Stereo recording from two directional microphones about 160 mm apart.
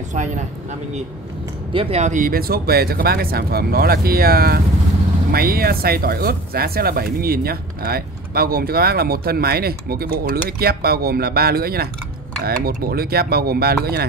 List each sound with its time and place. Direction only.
0.1 s speech: 50° right (ahead or behind)
1.7 s speech: 35° right (ahead or behind); by 13.7 s 70° right (ahead or behind)